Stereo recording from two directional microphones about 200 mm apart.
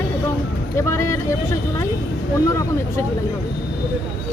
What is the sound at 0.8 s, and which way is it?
Speech, 15° left (ahead or behind).